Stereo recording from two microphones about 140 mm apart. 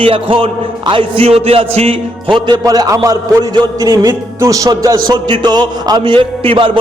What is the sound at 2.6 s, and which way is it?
A man's voice, 25° right (ahead or behind).